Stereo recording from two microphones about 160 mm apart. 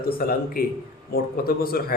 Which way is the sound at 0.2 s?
70° left (ahead or behind).